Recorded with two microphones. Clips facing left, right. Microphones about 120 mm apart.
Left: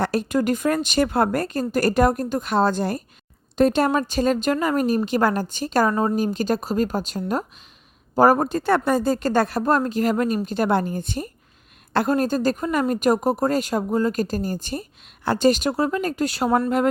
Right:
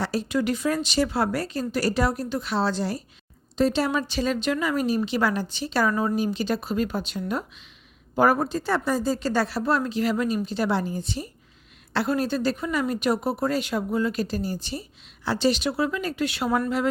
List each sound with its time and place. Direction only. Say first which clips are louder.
0.0 s speech: left 4 dB; 55° left (ahead or behind)